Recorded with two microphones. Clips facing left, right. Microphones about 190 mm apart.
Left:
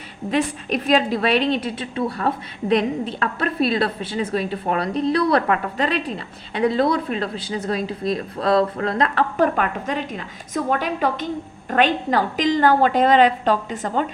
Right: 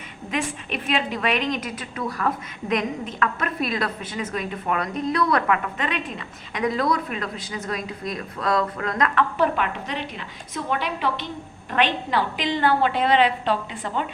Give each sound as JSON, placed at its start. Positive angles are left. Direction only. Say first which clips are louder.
{"t": 0.3, "sound": "a woman's voice", "louder": "left 6 dB", "side_deg": 40}
{"t": 9.4, "sound": "a woman's voice", "louder": "left 3 dB", "side_deg": 45}